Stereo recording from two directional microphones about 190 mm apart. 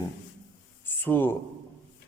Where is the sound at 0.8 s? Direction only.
10° left (ahead or behind).